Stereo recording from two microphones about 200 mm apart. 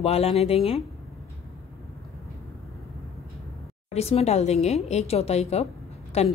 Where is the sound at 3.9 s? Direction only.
30° left (ahead or behind).